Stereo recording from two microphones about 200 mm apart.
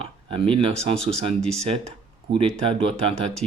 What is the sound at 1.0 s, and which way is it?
Speech, 30° right (ahead or behind).